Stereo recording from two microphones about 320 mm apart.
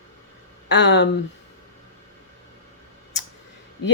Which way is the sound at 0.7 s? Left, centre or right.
Left.